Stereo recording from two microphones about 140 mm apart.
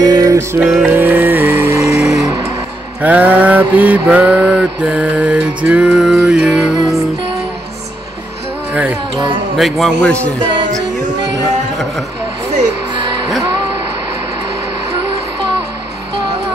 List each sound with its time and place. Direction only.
0.0 s music: 25° right (ahead or behind)
0.6 s a man's voice: 5° right (ahead or behind)
0.9 s music: 15° right (ahead or behind)
2.0 s music: 5° right (ahead or behind)
3.0 s mantra: 10° right (ahead or behind)
8.7 s music: 10° right (ahead or behind)
9.6 s a man's voice: centre (ahead or behind)
10.4 s music: 35° right (ahead or behind)
13.4 s music: 30° right (ahead or behind)